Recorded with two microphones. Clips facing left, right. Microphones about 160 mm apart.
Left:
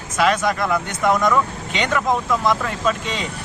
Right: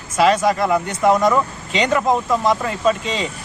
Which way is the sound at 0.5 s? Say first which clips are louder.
Right 3 dB; 10° right (ahead or behind).